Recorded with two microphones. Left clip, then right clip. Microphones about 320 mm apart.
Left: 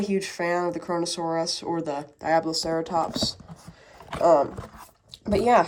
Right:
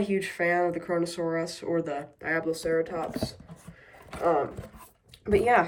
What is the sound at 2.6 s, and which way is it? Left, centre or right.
Speech, left.